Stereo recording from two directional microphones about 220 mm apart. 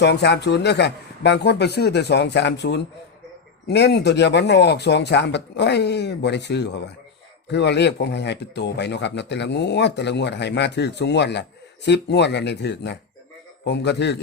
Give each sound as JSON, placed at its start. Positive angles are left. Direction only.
{"t": 0.0, "sound": "speech", "side_deg": 50}